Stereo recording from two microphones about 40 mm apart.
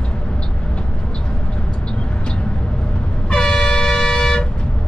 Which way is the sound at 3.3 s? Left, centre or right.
Left.